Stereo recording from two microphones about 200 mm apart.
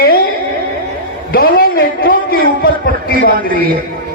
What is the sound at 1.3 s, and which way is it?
A man's voice, 45° left (ahead or behind).